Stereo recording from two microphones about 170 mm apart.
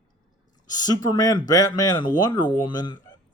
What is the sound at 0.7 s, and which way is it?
Speech, 25° left (ahead or behind).